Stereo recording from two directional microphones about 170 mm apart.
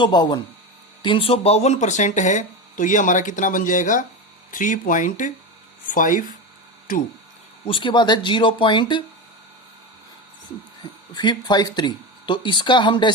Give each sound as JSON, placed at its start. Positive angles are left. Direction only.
{"t": 0.0, "sound": "speech", "side_deg": 25}
{"t": 7.6, "sound": "speech", "side_deg": 30}
{"t": 11.1, "sound": "speech", "side_deg": 25}